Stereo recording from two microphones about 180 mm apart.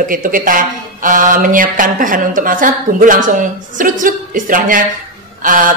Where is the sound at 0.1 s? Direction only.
50° right (ahead or behind).